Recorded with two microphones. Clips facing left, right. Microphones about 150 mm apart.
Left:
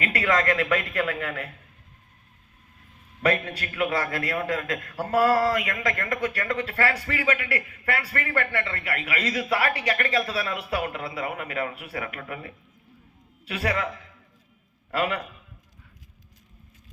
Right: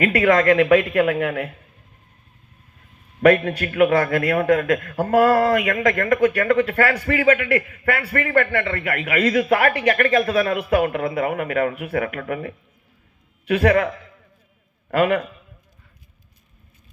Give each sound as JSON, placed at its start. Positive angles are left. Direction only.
{"t": 0.2, "sound": "a man's voice", "side_deg": -45}
{"t": 3.2, "sound": "a man's voice", "side_deg": -50}